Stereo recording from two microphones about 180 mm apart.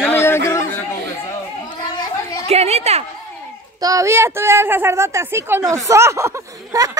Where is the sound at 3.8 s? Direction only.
15° right (ahead or behind).